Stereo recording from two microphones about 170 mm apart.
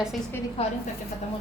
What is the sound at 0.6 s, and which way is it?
Speech, 35° left (ahead or behind).